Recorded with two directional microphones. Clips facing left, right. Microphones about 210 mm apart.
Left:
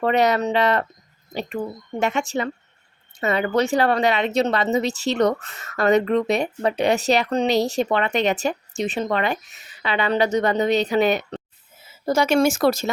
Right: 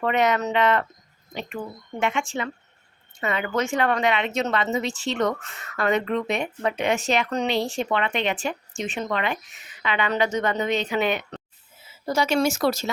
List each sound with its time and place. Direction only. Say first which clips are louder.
0.0 s speech: left 3 dB; 35° left (ahead or behind)
12.0 s speech: left 4 dB; 50° left (ahead or behind)